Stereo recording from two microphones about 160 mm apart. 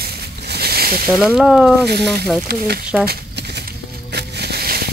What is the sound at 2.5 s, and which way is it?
Speech, 75° right (ahead or behind).